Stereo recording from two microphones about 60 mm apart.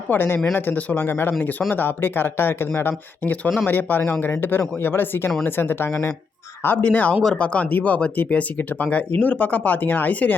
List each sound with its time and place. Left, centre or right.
0.1 s speech: left
0.5 s speech: left
0.9 s speech: left
6.8 s speech: left